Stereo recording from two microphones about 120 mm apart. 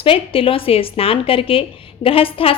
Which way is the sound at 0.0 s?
50° left (ahead or behind).